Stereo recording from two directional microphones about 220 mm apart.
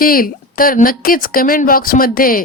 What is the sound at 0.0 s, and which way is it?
A woman's voice, 40° left (ahead or behind).